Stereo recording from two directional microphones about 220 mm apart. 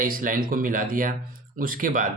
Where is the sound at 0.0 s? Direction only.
40° right (ahead or behind).